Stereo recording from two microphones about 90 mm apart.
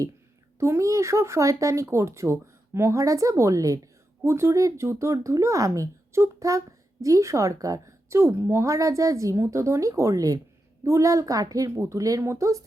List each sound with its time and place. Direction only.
0.6 s speech: 30° right (ahead or behind)